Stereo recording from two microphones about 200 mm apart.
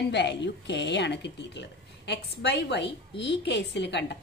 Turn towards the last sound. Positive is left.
turn(degrees=60)  # may be behind; listen again after turning